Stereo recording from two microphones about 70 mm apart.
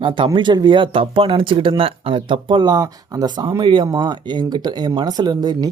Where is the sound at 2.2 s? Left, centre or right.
Right.